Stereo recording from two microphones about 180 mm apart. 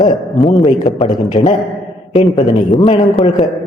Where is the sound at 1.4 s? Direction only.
30° left (ahead or behind).